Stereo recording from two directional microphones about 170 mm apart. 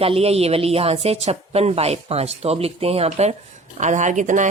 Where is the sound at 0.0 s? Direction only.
35° right (ahead or behind).